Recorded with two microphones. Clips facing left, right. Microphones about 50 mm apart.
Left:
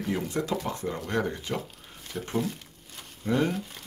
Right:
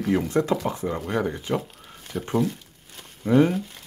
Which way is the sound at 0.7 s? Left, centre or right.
Centre.